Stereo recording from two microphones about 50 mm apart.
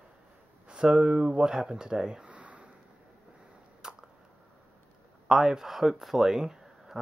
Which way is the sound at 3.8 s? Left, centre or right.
Centre.